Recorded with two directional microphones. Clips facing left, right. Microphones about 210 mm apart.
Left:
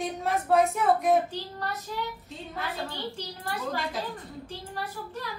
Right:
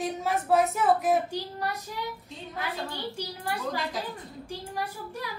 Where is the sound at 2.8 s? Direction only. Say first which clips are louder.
Even; 10° right (ahead or behind).